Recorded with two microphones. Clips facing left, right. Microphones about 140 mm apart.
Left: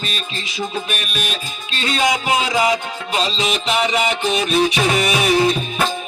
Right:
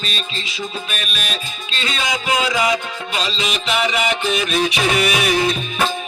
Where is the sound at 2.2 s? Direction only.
25° left (ahead or behind).